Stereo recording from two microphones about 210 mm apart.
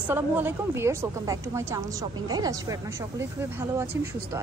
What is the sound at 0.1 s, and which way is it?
A woman's voice, 10° right (ahead or behind).